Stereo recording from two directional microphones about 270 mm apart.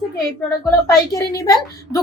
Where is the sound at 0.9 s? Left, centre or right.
Centre.